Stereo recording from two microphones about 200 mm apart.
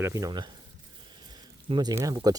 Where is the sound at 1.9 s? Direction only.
15° right (ahead or behind).